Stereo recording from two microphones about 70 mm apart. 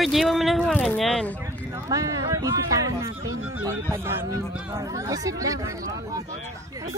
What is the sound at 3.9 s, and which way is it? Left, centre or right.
Speech, right.